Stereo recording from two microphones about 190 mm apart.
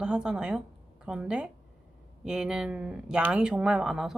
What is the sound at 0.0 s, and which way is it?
A woman's voice, 5° right (ahead or behind).